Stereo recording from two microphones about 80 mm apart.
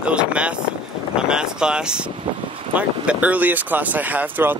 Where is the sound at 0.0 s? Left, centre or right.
Centre.